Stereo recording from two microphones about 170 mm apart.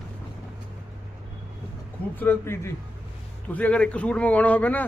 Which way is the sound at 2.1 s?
10° left (ahead or behind).